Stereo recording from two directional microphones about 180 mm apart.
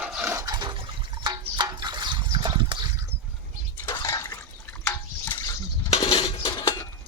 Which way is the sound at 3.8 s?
20° left (ahead or behind).